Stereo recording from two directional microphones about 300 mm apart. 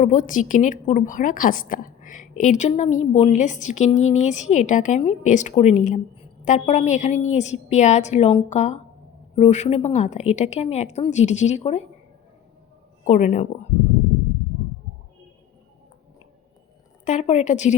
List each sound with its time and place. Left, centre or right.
0.0 s a woman's voice: left
13.1 s a woman's voice: left
17.1 s a woman's voice: left